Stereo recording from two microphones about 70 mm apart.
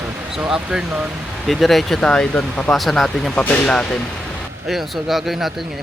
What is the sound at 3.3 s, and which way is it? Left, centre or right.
Speech, centre.